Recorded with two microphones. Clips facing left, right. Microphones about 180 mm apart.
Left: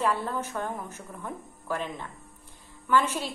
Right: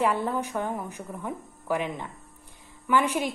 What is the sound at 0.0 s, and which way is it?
A woman's voice, 15° right (ahead or behind).